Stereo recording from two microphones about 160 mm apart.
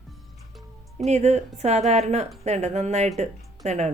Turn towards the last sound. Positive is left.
turn(degrees=-45)  # may be behind; listen again after turning